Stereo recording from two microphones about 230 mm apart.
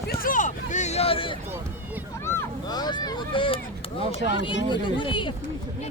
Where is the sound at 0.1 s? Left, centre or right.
Left.